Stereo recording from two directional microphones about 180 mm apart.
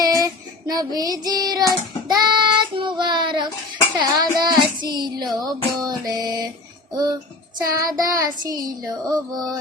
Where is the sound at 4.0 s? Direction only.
25° right (ahead or behind).